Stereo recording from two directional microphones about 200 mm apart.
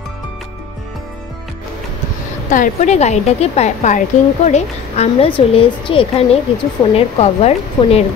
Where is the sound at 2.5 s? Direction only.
40° left (ahead or behind).